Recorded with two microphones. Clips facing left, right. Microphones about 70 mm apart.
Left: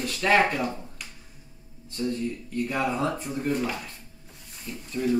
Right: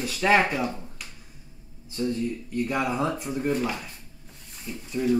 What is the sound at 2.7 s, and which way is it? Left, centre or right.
Speech, centre.